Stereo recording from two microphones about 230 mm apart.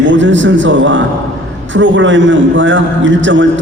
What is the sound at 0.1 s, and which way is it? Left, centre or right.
A man's voice, right.